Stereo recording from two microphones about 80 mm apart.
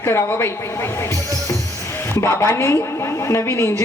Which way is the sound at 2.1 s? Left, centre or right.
Left.